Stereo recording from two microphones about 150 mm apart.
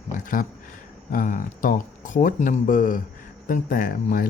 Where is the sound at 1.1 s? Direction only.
60° left (ahead or behind).